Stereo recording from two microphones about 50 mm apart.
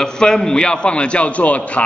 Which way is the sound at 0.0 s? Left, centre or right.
Centre.